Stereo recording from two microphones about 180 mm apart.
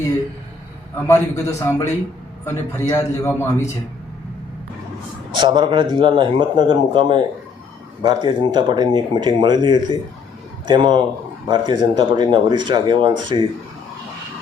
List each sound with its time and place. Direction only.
0.9 s a man's voice: 15° left (ahead or behind)
5.3 s speech: 25° right (ahead or behind)